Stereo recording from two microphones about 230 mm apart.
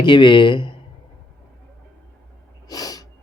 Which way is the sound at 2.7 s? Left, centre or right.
Centre.